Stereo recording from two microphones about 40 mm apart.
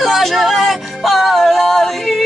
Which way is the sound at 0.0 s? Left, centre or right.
Centre.